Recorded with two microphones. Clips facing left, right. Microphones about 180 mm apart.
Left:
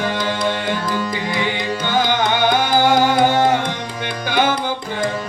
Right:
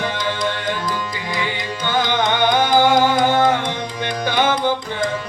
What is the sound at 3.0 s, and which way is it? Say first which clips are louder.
Music: left 1 dB; 15° left (ahead or behind).